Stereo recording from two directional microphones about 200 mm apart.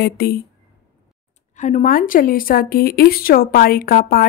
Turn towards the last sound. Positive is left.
turn(degrees=50)  # may be behind; listen again after turning